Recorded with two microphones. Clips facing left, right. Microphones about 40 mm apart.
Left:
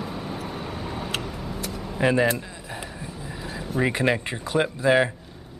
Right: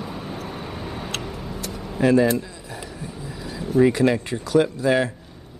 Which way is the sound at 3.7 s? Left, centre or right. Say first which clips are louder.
Right 6 dB; left.